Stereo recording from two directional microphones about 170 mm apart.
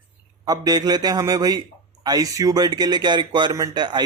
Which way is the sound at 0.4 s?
20° right (ahead or behind).